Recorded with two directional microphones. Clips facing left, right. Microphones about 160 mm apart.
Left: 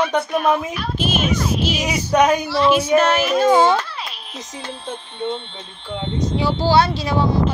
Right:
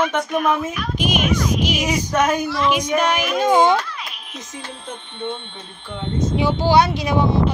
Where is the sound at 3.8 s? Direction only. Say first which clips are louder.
Left 2 dB; 30° left (ahead or behind).